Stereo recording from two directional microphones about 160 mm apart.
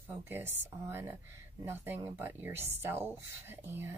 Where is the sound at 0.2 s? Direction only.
15° right (ahead or behind).